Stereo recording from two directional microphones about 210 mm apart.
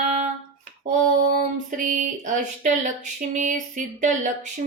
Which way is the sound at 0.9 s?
40° right (ahead or behind).